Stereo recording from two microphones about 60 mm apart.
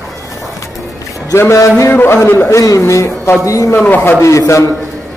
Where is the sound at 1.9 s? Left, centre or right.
Left.